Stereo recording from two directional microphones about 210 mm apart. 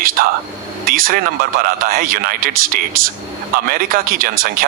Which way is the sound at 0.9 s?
45° right (ahead or behind).